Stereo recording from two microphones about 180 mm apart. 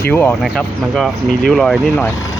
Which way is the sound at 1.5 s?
Centre (ahead or behind).